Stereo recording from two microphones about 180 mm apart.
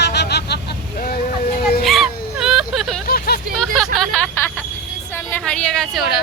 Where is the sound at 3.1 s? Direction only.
60° left (ahead or behind).